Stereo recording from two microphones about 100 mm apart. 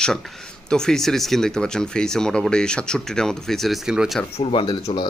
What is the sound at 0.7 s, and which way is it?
Speech, 5° left (ahead or behind).